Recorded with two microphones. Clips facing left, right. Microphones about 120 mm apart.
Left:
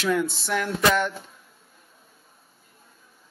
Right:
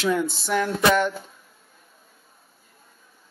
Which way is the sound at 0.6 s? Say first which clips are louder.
Right 2 dB; 5° right (ahead or behind).